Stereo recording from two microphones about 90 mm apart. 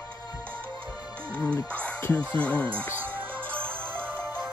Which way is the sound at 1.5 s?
15° left (ahead or behind).